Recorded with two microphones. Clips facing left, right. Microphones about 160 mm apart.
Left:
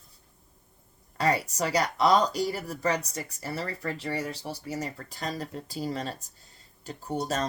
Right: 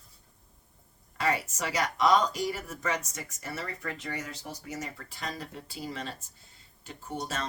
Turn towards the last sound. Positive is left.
turn(degrees=40)  # may be behind; listen again after turning